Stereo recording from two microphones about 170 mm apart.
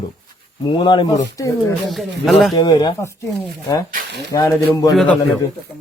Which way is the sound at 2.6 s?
25° left (ahead or behind).